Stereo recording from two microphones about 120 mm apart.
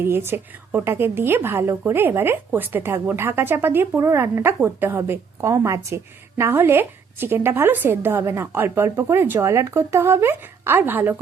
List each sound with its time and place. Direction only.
0.0 s a woman's voice: 20° right (ahead or behind)